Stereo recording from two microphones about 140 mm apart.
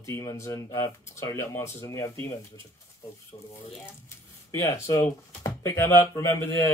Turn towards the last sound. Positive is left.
turn(degrees=20)  # may be behind; listen again after turning